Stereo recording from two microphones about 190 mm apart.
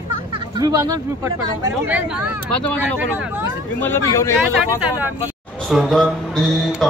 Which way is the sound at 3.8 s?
15° left (ahead or behind).